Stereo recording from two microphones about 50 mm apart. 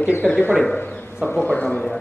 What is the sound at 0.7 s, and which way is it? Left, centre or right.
Speech, left.